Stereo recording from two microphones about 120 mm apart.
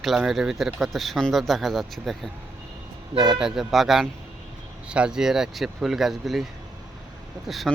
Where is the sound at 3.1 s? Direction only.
40° right (ahead or behind).